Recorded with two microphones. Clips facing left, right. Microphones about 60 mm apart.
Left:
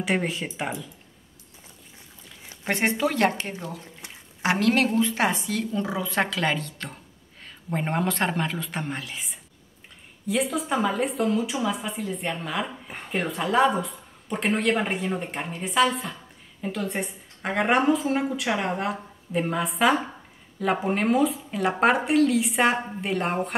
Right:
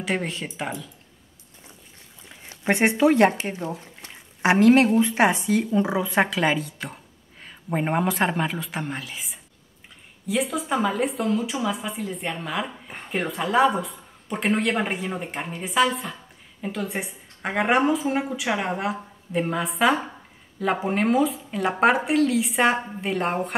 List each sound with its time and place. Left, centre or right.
0.0 s a woman's voice: centre
2.6 s a woman's voice: centre